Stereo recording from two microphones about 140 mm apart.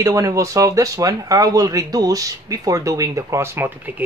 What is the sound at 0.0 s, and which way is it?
Speech, 25° right (ahead or behind).